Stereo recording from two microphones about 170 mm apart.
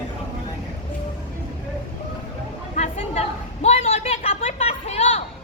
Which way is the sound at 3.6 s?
35° left (ahead or behind).